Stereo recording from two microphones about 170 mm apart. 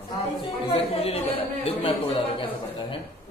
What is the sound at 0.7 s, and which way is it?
A woman's voice, 35° left (ahead or behind).